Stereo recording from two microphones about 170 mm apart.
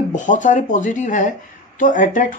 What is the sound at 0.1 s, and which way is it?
Speech, 50° left (ahead or behind).